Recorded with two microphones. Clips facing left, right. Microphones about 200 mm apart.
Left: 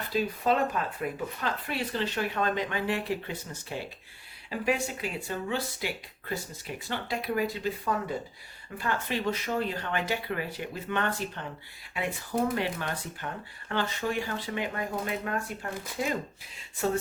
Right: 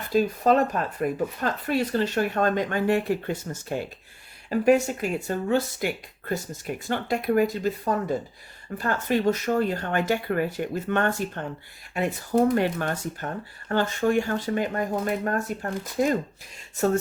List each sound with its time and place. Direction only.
0.1 s speech: 45° right (ahead or behind)
12.5 s speech: 50° right (ahead or behind)